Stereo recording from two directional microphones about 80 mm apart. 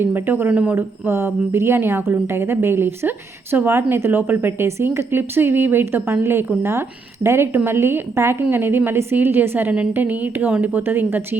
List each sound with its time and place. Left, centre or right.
0.0 s a woman's voice: right
0.8 s a woman's voice: right